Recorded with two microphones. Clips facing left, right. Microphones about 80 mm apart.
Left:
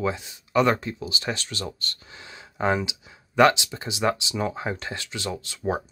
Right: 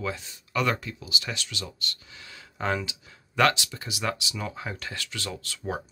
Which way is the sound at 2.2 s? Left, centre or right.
Left.